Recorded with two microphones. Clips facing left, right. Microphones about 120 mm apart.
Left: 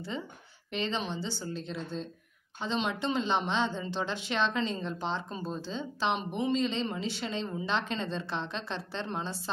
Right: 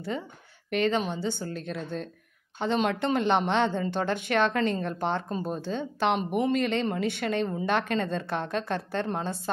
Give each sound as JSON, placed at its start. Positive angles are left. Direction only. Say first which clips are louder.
{"t": 0.7, "sound": "a woman's voice", "louder": "right 7 dB", "side_deg": -55}